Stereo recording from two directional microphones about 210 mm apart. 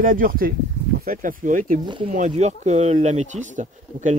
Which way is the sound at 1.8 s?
20° right (ahead or behind).